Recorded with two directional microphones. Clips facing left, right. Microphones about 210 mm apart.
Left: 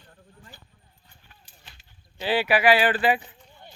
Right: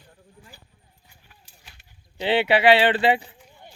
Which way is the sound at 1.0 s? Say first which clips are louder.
Right 1 dB; 10° right (ahead or behind).